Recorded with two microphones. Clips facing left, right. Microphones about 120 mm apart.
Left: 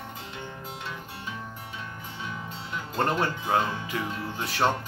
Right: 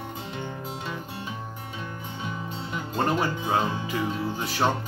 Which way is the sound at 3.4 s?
5° right (ahead or behind).